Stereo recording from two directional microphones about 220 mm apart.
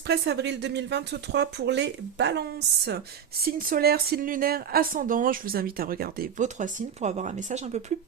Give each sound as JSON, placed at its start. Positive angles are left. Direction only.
{"t": 0.1, "sound": "a woman's voice", "side_deg": -50}